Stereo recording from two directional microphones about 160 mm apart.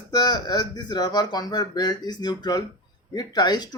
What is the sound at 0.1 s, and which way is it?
Speech, 25° left (ahead or behind).